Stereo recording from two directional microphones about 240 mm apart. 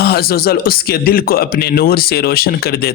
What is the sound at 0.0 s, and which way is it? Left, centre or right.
A man's voice, left.